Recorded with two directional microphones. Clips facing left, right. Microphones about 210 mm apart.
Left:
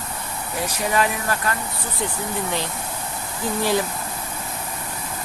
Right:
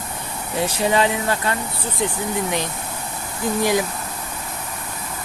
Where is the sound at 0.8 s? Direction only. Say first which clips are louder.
Right 3 dB; 25° right (ahead or behind).